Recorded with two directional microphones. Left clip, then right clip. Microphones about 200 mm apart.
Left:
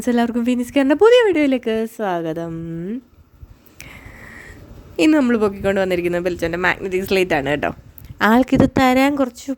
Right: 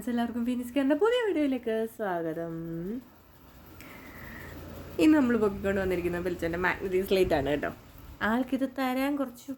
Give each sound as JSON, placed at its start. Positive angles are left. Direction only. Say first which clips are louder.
{"t": 0.0, "sound": "speech", "louder": "left 13 dB", "side_deg": 50}
{"t": 4.9, "sound": "speech", "louder": "left 8 dB", "side_deg": 50}